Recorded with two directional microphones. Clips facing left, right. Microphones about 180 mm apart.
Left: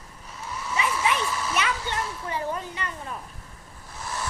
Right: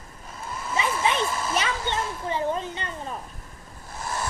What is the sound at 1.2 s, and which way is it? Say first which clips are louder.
Hair dryer: right 1 dB; 50° right (ahead or behind).